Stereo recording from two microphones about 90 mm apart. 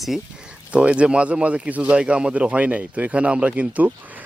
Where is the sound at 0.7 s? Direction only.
15° right (ahead or behind).